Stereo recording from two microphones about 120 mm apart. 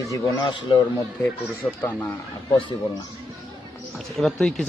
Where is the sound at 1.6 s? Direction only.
15° left (ahead or behind).